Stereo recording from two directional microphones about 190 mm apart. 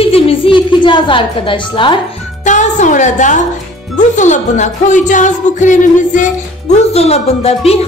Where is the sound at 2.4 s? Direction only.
40° left (ahead or behind).